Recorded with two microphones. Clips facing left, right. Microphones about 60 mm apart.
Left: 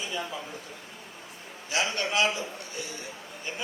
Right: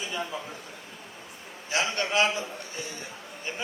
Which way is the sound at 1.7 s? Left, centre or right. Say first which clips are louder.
Right 1 dB; right.